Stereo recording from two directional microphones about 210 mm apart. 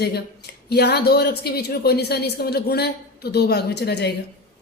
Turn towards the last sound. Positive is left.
turn(degrees=50)  # may be behind; listen again after turning